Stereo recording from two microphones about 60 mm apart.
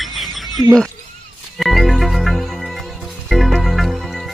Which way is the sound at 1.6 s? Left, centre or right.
Centre.